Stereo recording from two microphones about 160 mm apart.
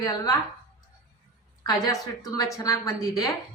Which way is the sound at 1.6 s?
25° left (ahead or behind).